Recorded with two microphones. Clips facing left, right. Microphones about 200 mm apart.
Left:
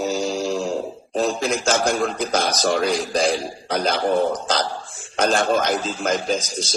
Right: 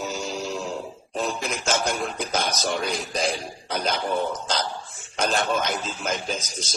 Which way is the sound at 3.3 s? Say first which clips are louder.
Left 6 dB; 40° left (ahead or behind).